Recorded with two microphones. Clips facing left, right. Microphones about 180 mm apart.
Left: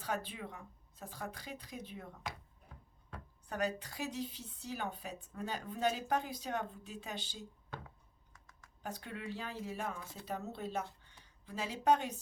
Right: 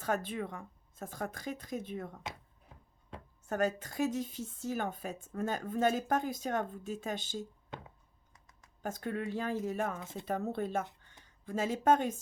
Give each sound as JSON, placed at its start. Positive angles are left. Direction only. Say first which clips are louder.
{"t": 0.0, "sound": "a woman's voice", "louder": "right 6 dB", "side_deg": -50}
{"t": 2.3, "sound": "a sound", "louder": "right 1 dB", "side_deg": -25}
{"t": 3.4, "sound": "a woman's voice", "louder": "right 5 dB", "side_deg": -45}
{"t": 7.7, "sound": "a sound", "louder": "right 2 dB", "side_deg": -20}
{"t": 8.8, "sound": "a woman's voice", "louder": "right 8 dB", "side_deg": -45}
{"t": 10.0, "sound": "speech", "louder": "right 6 dB", "side_deg": -20}
{"t": 10.2, "sound": "a woman's voice", "louder": "right 7 dB", "side_deg": -50}